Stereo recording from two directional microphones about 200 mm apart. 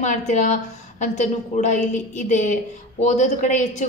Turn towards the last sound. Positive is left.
turn(degrees=40)  # may be behind; listen again after turning